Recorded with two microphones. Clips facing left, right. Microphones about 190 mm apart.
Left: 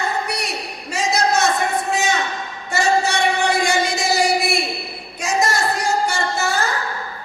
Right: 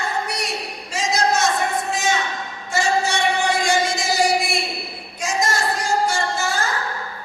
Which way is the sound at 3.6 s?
65° left (ahead or behind).